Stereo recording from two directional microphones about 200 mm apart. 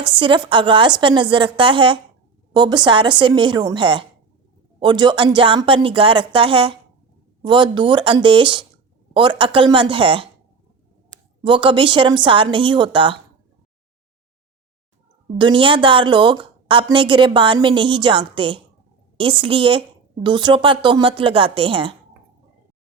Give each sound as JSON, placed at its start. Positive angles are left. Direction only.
{"t": 0.2, "sound": "a woman's voice", "side_deg": -25}
{"t": 11.4, "sound": "a woman's voice", "side_deg": -25}
{"t": 15.4, "sound": "a woman's voice", "side_deg": -25}